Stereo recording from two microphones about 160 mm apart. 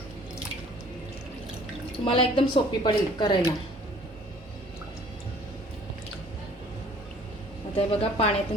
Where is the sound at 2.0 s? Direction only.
35° left (ahead or behind).